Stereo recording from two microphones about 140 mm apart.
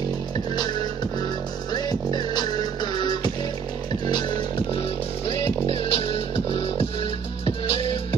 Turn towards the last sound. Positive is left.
turn(degrees=40)  # may be behind; listen again after turning